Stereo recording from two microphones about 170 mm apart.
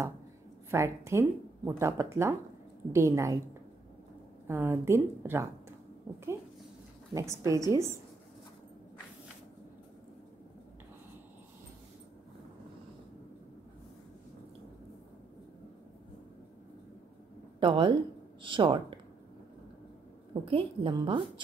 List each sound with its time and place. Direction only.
0.7 s speech: 15° right (ahead or behind)
4.5 s speech: 15° right (ahead or behind)
7.2 s a woman's voice: 20° right (ahead or behind)
17.6 s a woman's voice: 30° right (ahead or behind)
20.4 s a woman's voice: 30° right (ahead or behind)